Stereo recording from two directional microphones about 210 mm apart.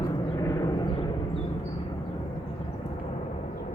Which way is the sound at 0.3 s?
15° left (ahead or behind).